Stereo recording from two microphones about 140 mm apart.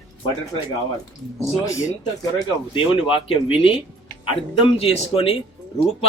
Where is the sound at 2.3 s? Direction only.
35° left (ahead or behind).